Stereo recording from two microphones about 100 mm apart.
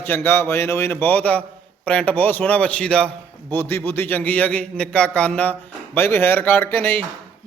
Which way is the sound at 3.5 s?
25° left (ahead or behind).